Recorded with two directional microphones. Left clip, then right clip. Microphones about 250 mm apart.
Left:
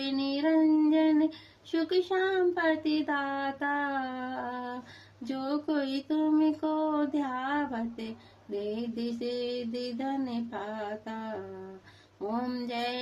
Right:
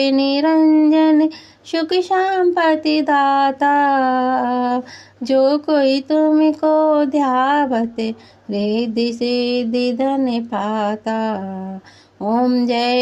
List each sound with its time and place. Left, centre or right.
0.0 s music: right
1.7 s speech: right
12.3 s speech: right